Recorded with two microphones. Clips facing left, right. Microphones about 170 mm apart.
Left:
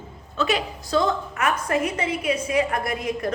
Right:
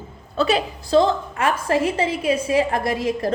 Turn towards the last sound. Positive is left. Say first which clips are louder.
# right 4 dB
turn(degrees=-30)  # may be behind; listen again after turning